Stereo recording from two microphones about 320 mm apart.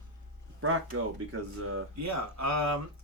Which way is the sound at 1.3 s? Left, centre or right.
Right.